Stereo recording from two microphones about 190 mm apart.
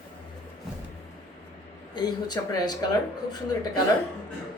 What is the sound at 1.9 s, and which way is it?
Speech, 20° left (ahead or behind).